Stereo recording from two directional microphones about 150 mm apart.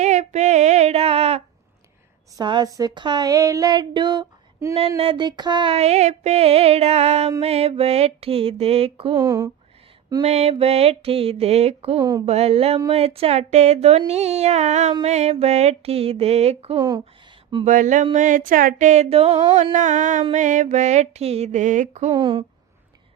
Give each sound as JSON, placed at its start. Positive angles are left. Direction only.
{"t": 0.0, "sound": "child singing", "side_deg": -50}
{"t": 2.3, "sound": "speech", "side_deg": -30}
{"t": 4.9, "sound": "music", "side_deg": -35}
{"t": 9.1, "sound": "speech", "side_deg": -25}
{"t": 10.2, "sound": "music", "side_deg": -45}
{"t": 12.2, "sound": "female singing", "side_deg": -45}
{"t": 16.7, "sound": "speech", "side_deg": -25}
{"t": 17.7, "sound": "a sound", "side_deg": -60}
{"t": 20.3, "sound": "female singing", "side_deg": -55}
{"t": 22.1, "sound": "music", "side_deg": -30}